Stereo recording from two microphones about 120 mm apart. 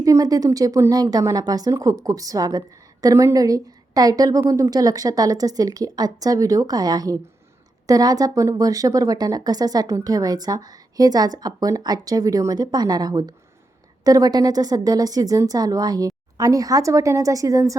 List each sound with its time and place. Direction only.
0.0 s a woman's voice: 30° right (ahead or behind)